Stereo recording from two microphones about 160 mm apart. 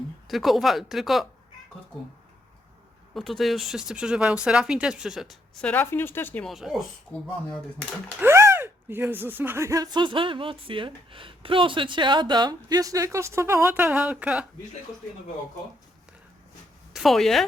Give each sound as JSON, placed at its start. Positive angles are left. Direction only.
{"t": 0.3, "sound": "speech", "side_deg": 0}
{"t": 3.2, "sound": "speech", "side_deg": 0}
{"t": 6.5, "sound": "speech", "side_deg": 0}
{"t": 8.2, "sound": "speech", "side_deg": -15}
{"t": 16.9, "sound": "speech", "side_deg": 0}